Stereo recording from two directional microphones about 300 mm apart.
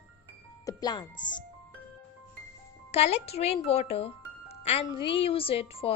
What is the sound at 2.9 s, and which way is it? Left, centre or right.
A child's voice, left.